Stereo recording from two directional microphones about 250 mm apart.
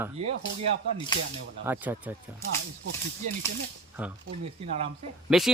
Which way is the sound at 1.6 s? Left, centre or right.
Centre.